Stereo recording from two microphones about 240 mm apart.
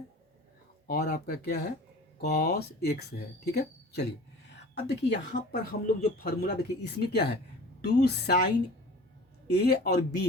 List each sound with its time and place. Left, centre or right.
0.9 s speech: left
9.6 s speech: left